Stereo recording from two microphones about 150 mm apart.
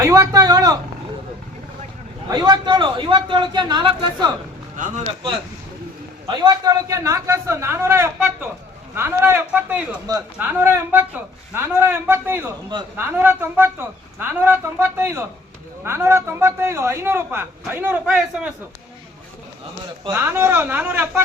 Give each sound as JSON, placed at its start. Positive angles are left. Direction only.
{"t": 0.0, "sound": "a man's voice", "side_deg": -25}
{"t": 2.3, "sound": "a man's voice", "side_deg": -30}
{"t": 6.2, "sound": "a man's voice", "side_deg": -25}
{"t": 20.1, "sound": "a man's voice", "side_deg": -15}